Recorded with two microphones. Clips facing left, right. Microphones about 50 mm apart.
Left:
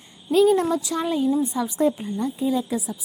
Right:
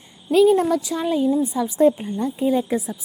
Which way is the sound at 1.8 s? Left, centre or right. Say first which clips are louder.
Right 5 dB; right.